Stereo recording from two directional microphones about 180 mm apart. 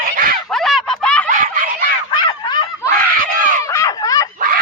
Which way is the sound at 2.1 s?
25° left (ahead or behind).